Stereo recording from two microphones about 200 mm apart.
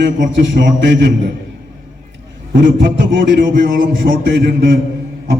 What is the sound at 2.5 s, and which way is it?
Speech, 65° right (ahead or behind).